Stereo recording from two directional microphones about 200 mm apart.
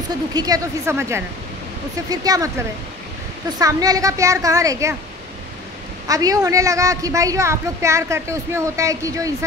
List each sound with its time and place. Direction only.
0.1 s a woman's voice: 20° right (ahead or behind)
3.5 s a woman's voice: 20° right (ahead or behind)
6.0 s a woman's voice: 15° right (ahead or behind)